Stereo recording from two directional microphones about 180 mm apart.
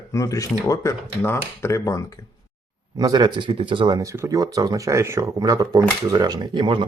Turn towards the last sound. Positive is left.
turn(degrees=-25)  # may be behind; listen again after turning